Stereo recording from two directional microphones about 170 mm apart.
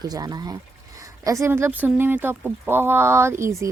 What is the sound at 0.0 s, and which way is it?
Speech, 25° right (ahead or behind).